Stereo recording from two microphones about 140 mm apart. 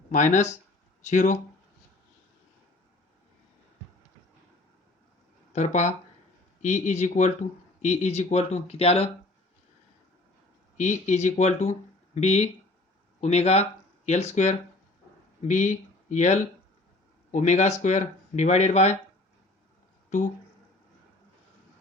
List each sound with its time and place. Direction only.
0.1 s speech: 60° left (ahead or behind)
5.5 s speech: 55° left (ahead or behind)
10.8 s speech: 55° left (ahead or behind)